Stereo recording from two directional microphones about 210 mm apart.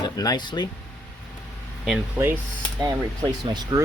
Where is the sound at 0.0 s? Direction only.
20° left (ahead or behind).